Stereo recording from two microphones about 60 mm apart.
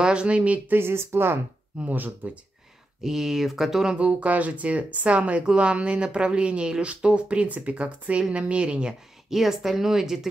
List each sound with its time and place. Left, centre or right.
0.0 s speech: centre
0.7 s speech: right
1.8 s speech: right
3.0 s speech: centre
3.9 s speech: right
9.3 s speech: centre